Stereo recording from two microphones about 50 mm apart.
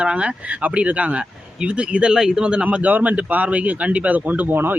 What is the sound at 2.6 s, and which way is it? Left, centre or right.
A man's voice, right.